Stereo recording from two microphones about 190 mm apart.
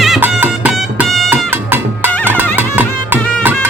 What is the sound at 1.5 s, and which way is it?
Music, 10° right (ahead or behind).